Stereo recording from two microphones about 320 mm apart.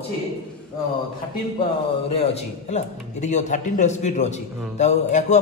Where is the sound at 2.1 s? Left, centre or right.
Centre.